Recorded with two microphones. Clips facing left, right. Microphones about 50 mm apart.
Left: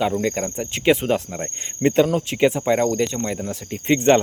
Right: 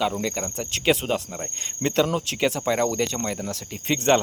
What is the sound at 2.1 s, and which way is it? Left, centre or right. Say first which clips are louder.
Speech: left 5 dB; left.